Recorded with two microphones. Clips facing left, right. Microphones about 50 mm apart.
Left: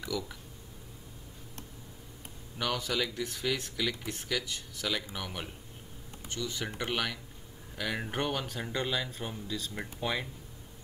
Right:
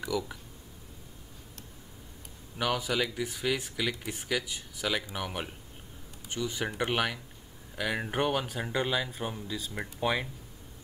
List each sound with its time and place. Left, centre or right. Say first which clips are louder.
0.1 s speech: right 4 dB; centre
2.6 s speech: right 3 dB; centre